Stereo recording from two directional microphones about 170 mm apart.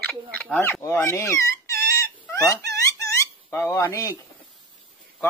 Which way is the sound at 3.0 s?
15° left (ahead or behind).